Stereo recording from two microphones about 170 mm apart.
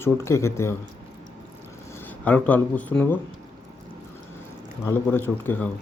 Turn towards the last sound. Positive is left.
turn(degrees=10)  # may be behind; listen again after turning